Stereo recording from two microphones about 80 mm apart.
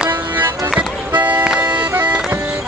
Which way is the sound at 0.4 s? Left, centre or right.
Right.